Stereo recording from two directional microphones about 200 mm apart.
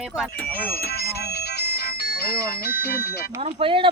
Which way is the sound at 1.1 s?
55° left (ahead or behind).